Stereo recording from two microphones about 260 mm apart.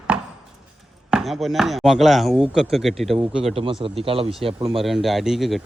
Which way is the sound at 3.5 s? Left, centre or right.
Centre.